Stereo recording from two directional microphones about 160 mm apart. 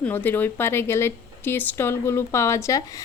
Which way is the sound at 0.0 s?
10° left (ahead or behind).